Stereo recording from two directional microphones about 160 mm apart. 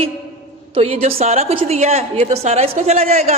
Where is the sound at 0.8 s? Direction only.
35° right (ahead or behind).